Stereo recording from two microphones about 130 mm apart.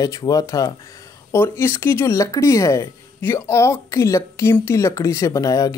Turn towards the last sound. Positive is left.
turn(degrees=25)  # may be behind; listen again after turning